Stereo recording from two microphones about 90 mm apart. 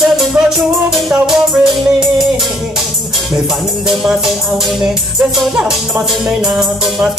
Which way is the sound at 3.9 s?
5° right (ahead or behind).